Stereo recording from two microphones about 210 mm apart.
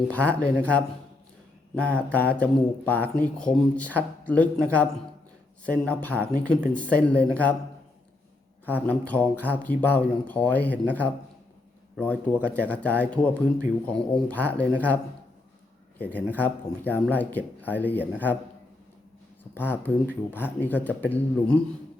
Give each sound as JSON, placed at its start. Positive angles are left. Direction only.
{"t": 0.1, "sound": "speech", "side_deg": 5}
{"t": 2.0, "sound": "speech", "side_deg": 5}
{"t": 8.6, "sound": "speech", "side_deg": 5}
{"t": 19.5, "sound": "speech", "side_deg": 10}